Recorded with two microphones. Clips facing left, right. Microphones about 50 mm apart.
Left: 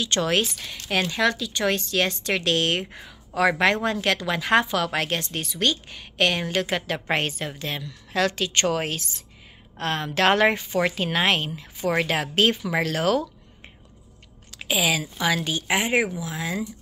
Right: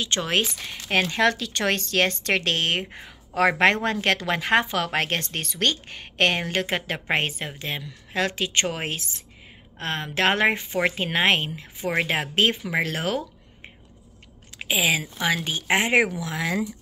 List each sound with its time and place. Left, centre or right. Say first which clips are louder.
0.0 s a woman's voice: left 1 dB; right
1.0 s speech: right 1 dB; right
3.3 s a woman's voice: right 1 dB; right
14.6 s a woman's voice: even; right
15.7 s speech: right 3 dB; right